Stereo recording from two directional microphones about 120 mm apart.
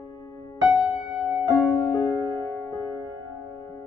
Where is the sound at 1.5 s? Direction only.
20° left (ahead or behind).